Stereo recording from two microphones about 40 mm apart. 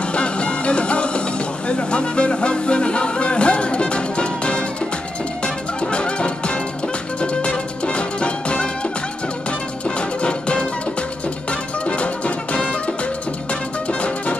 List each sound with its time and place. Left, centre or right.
0.1 s music: left
9.8 s music: left
12.5 s music: left